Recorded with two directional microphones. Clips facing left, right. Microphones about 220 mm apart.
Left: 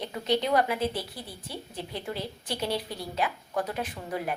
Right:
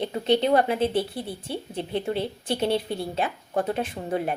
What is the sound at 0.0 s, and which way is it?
A woman's voice, 30° right (ahead or behind).